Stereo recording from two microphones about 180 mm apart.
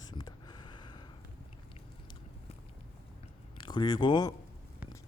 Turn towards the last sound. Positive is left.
turn(degrees=25)  # may be behind; listen again after turning